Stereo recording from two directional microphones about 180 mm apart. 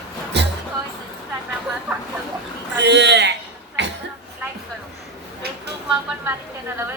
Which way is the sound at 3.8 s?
75° right (ahead or behind).